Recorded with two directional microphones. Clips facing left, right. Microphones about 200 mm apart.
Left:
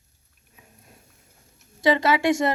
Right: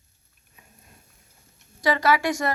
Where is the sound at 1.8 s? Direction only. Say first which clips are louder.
Left 2 dB; 25° left (ahead or behind).